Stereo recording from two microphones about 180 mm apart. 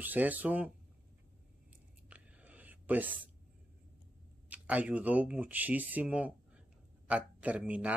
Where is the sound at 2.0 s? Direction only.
5° right (ahead or behind).